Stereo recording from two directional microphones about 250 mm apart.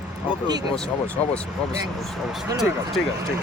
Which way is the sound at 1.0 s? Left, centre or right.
Centre.